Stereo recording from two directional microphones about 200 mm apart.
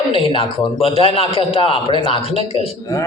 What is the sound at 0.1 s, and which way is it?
A man's voice, 25° left (ahead or behind).